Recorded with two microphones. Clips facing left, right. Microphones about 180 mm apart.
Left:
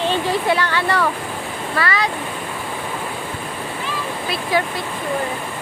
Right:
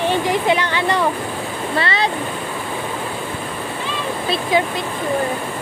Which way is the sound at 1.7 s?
25° right (ahead or behind).